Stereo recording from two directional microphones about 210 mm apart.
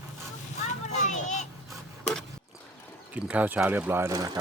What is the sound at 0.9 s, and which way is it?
Vehicle, 35° left (ahead or behind).